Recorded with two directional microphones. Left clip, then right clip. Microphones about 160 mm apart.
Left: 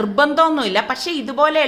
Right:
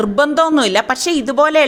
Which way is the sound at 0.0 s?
55° right (ahead or behind).